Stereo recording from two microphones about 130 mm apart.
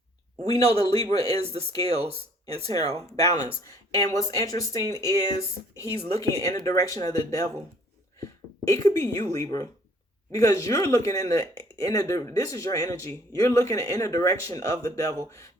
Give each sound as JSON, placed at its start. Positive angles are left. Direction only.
{"t": 0.6, "sound": "speech", "side_deg": -50}
{"t": 3.6, "sound": "speech", "side_deg": 25}
{"t": 8.6, "sound": "speech", "side_deg": 25}